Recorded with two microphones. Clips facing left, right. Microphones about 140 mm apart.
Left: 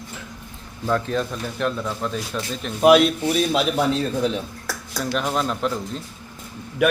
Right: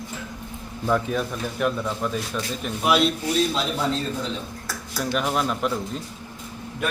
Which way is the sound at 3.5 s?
70° left (ahead or behind).